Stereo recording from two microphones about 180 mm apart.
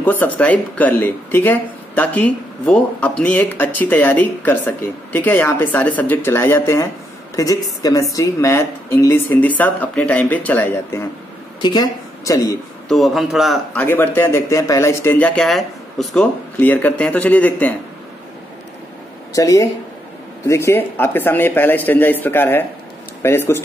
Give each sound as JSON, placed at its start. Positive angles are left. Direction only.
{"t": 0.0, "sound": "speech", "side_deg": 10}
{"t": 12.8, "sound": "a man's voice", "side_deg": 0}
{"t": 13.7, "sound": "speech", "side_deg": 10}
{"t": 19.3, "sound": "speech", "side_deg": 20}